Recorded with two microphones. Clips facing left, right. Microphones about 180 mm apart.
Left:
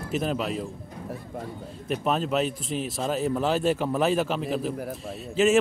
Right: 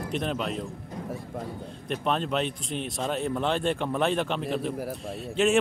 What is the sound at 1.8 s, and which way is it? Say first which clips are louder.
Speech: left 2 dB; 5° left (ahead or behind).